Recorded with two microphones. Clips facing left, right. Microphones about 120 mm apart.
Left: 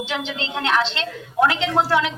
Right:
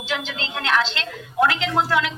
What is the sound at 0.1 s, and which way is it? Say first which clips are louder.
A woman's voice: left 1 dB; 25° left (ahead or behind).